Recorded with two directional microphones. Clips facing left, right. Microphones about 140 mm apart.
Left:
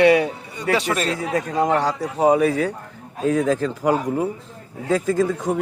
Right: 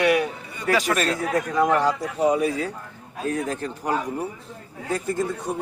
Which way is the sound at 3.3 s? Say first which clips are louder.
Left 7 dB; 90° left.